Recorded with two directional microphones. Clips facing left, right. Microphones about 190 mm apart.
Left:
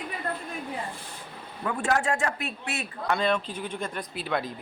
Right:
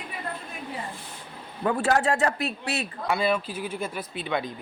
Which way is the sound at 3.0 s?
5° right (ahead or behind).